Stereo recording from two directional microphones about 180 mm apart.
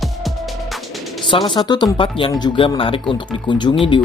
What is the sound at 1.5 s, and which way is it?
Speech, 25° left (ahead or behind).